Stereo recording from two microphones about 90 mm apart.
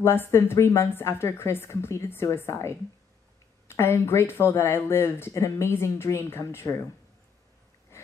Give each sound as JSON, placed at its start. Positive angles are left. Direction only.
{"t": 0.0, "sound": "speech", "side_deg": 30}